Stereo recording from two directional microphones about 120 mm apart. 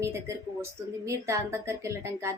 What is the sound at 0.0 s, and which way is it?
Speech, 25° right (ahead or behind).